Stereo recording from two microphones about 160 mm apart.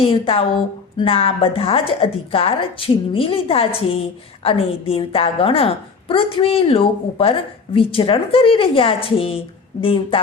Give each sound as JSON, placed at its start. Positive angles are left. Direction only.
{"t": 0.0, "sound": "a woman's voice", "side_deg": 35}